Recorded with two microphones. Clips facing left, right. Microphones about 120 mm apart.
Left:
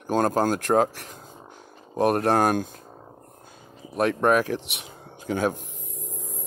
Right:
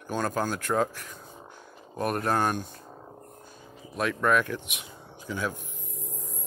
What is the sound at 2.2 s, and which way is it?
Speech, 75° left (ahead or behind).